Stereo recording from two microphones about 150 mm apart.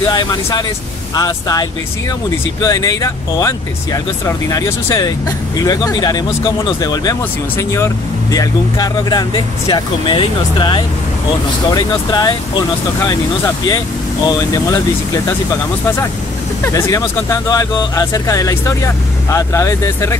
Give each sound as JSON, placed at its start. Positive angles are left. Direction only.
{"t": 0.1, "sound": "speech", "side_deg": 25}
{"t": 14.2, "sound": "speech", "side_deg": 25}
{"t": 16.6, "sound": "speech", "side_deg": 20}